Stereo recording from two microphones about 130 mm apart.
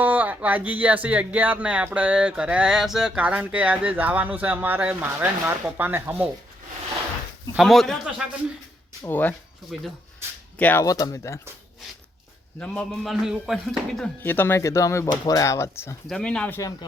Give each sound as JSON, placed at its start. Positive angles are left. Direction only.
{"t": 0.0, "sound": "speech", "side_deg": -10}
{"t": 7.5, "sound": "speech", "side_deg": 0}
{"t": 9.0, "sound": "speech", "side_deg": 15}
{"t": 10.6, "sound": "speech", "side_deg": 15}
{"t": 10.8, "sound": "speech", "side_deg": 25}
{"t": 12.5, "sound": "speech", "side_deg": 5}
{"t": 14.2, "sound": "speech", "side_deg": 15}
{"t": 16.0, "sound": "speech", "side_deg": 5}